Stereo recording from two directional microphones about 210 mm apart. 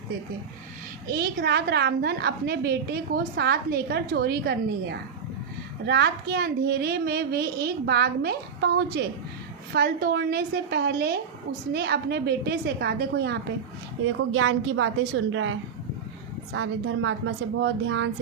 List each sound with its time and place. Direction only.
1.0 s a woman's voice: 45° right (ahead or behind)
14.0 s a woman's voice: 65° right (ahead or behind)